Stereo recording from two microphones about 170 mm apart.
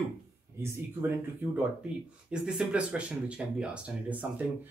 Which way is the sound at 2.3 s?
5° right (ahead or behind).